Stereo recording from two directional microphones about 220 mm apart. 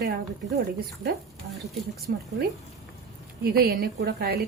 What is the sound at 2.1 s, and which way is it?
Speech, 45° right (ahead or behind).